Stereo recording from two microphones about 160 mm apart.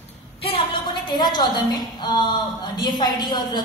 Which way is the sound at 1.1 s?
25° left (ahead or behind).